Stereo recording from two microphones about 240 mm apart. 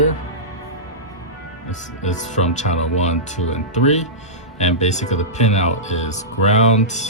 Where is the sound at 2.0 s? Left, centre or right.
Left.